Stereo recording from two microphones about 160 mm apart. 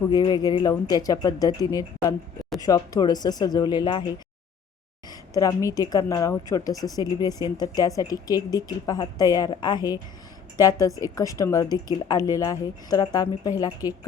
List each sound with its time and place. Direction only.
0.1 s speech: 25° left (ahead or behind)
5.0 s speech: 20° left (ahead or behind)